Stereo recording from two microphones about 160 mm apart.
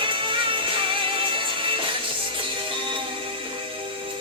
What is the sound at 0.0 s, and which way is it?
Music, 35° right (ahead or behind).